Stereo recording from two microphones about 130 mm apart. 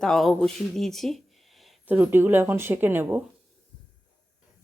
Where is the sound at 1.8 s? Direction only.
15° right (ahead or behind).